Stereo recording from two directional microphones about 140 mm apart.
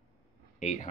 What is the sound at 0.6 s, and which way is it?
Speech, 60° left (ahead or behind).